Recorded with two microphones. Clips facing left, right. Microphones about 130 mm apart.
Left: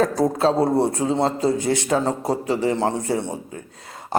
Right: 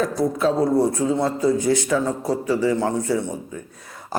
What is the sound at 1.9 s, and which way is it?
Speech, 45° left (ahead or behind).